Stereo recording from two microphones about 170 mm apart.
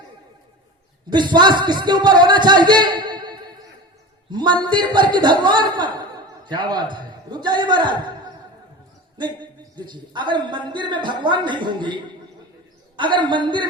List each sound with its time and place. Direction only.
1.1 s a man's voice: 25° right (ahead or behind)